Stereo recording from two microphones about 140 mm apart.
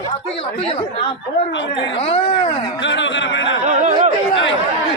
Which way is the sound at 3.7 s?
60° right (ahead or behind).